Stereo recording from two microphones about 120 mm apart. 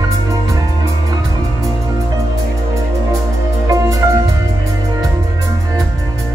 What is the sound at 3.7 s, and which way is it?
Music, 30° right (ahead or behind).